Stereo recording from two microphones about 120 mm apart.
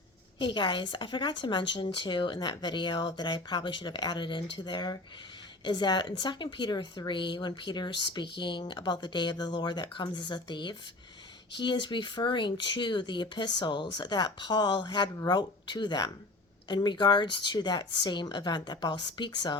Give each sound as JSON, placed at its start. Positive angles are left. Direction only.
{"t": 0.3, "sound": "speech", "side_deg": 40}